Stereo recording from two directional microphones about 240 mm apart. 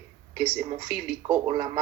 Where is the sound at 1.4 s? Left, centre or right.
Centre.